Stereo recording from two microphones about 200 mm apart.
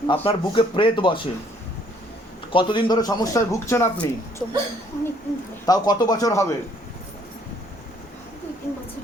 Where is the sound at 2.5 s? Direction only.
25° left (ahead or behind).